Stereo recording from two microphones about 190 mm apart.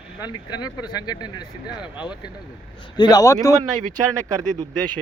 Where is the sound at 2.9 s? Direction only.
20° left (ahead or behind).